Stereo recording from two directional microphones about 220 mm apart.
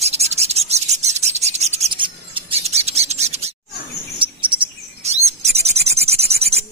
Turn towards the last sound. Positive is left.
turn(degrees=-30)  # may be behind; listen again after turning